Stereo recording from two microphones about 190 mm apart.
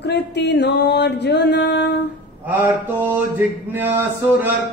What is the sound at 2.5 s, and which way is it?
Mantra, 10° right (ahead or behind).